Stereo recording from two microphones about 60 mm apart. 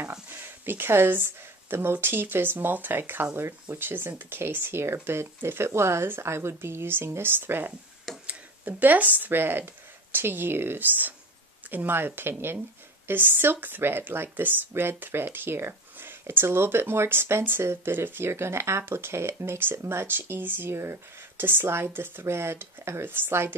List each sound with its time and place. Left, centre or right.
0.3 s speech: right
22.2 s speech: right